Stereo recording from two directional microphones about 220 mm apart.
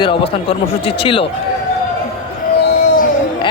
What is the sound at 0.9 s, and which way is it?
Speech, 25° left (ahead or behind).